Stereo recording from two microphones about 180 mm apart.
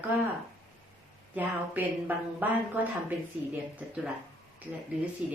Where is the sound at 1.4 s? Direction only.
10° right (ahead or behind).